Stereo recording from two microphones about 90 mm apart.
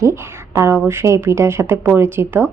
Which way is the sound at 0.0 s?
35° right (ahead or behind).